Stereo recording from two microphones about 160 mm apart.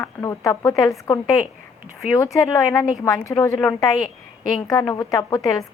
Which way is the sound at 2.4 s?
20° left (ahead or behind).